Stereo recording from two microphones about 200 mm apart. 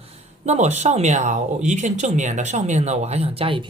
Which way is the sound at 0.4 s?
35° right (ahead or behind).